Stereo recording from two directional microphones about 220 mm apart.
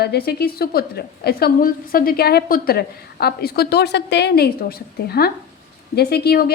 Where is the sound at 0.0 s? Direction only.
45° left (ahead or behind).